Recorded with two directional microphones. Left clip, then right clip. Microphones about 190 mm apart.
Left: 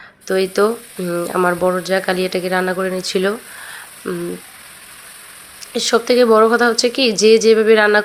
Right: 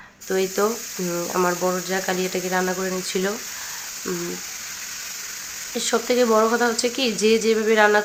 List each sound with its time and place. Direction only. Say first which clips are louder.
0.3 s speech: left 6 dB; 20° left (ahead or behind)
5.7 s speech: left 7 dB; 25° left (ahead or behind)